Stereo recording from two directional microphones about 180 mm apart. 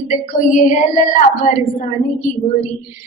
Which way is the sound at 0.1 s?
45° left (ahead or behind).